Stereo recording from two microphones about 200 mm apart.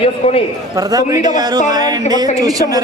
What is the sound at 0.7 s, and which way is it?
A man's voice, 15° right (ahead or behind).